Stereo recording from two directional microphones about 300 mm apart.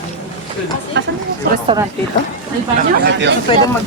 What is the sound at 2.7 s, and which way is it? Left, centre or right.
Speech, right.